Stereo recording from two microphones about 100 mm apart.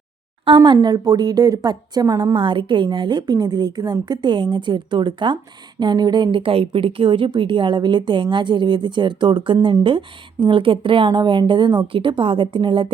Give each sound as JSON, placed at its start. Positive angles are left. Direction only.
{"t": 0.4, "sound": "a woman's voice", "side_deg": -55}
{"t": 2.3, "sound": "a woman's voice", "side_deg": -55}
{"t": 6.4, "sound": "a woman's voice", "side_deg": -70}